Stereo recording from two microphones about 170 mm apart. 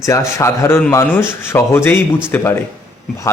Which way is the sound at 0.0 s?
15° left (ahead or behind).